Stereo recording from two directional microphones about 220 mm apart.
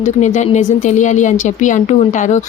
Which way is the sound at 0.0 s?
35° left (ahead or behind).